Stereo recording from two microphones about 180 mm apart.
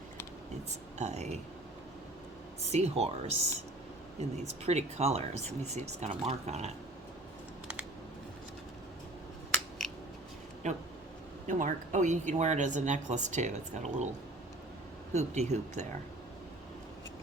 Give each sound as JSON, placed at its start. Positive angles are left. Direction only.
{"t": 0.9, "sound": "a woman's voice", "side_deg": -40}
{"t": 2.6, "sound": "a woman's voice", "side_deg": -35}
{"t": 9.6, "sound": "scissors", "side_deg": 0}
{"t": 10.6, "sound": "a woman's voice", "side_deg": -40}
{"t": 15.1, "sound": "a woman's voice", "side_deg": -40}